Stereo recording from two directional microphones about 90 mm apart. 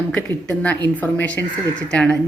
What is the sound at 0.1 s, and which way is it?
A woman's voice, 15° left (ahead or behind).